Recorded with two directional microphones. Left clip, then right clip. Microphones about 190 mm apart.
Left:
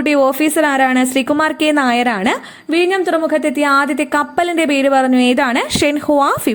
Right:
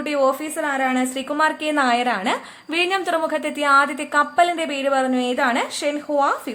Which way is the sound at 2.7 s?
20° left (ahead or behind).